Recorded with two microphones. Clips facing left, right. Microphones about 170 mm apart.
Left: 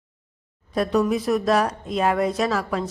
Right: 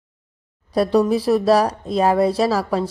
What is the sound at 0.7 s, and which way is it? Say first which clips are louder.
A woman's voice: right 4 dB; 35° right (ahead or behind).